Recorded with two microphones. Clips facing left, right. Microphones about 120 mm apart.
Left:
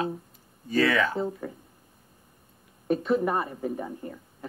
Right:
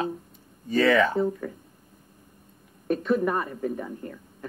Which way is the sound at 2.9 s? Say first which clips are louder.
Right 1 dB; 20° left (ahead or behind).